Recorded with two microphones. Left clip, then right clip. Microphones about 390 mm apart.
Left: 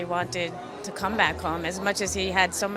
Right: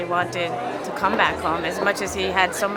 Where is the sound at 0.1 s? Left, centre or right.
Left.